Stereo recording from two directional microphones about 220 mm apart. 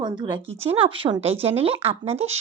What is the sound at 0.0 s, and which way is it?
Speech, 20° right (ahead or behind).